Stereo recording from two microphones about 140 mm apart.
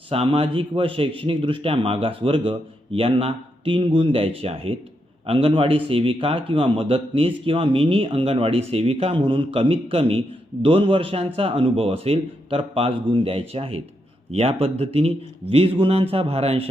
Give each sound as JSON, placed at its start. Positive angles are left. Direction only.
{"t": 0.1, "sound": "a man's voice", "side_deg": -45}